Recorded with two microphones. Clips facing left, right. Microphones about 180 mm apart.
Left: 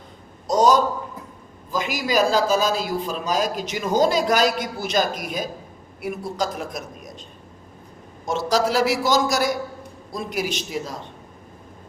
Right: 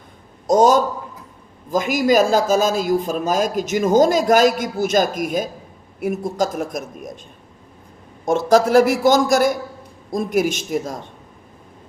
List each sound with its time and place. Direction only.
0.4 s a man's voice: 50° right (ahead or behind)
8.2 s a man's voice: 50° right (ahead or behind)